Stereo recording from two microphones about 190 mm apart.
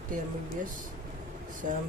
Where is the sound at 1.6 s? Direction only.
40° right (ahead or behind).